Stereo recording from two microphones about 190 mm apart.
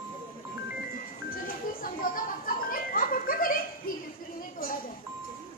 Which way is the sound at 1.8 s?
45° left (ahead or behind).